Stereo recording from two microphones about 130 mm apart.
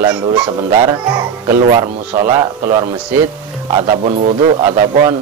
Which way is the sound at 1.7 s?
40° right (ahead or behind).